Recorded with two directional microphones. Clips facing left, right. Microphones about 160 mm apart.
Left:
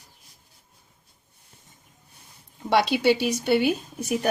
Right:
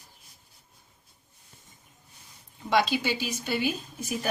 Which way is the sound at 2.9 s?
65° left (ahead or behind).